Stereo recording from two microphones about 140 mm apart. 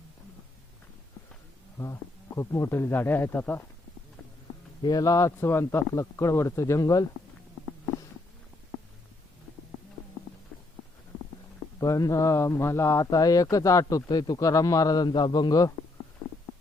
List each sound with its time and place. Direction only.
1.8 s speech: 20° left (ahead or behind)
4.8 s speech: 25° left (ahead or behind)
11.8 s speech: 25° left (ahead or behind)